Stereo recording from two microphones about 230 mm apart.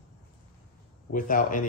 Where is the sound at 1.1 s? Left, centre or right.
Left.